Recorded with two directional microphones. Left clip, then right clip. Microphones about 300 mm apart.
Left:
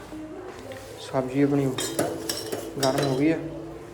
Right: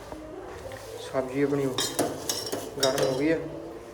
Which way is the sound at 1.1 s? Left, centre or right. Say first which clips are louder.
Left 3 dB; centre.